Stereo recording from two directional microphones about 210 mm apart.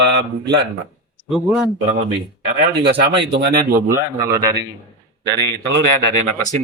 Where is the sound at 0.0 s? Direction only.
55° right (ahead or behind).